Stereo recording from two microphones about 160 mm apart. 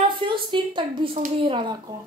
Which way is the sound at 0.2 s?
30° right (ahead or behind).